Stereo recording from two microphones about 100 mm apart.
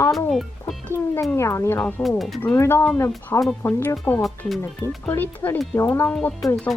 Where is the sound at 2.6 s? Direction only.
25° left (ahead or behind).